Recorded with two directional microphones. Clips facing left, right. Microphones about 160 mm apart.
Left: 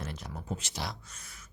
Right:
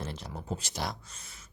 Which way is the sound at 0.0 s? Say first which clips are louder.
Right 2 dB; 30° right (ahead or behind).